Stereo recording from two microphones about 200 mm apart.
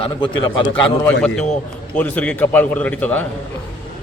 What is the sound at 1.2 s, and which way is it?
A man's voice, 5° left (ahead or behind).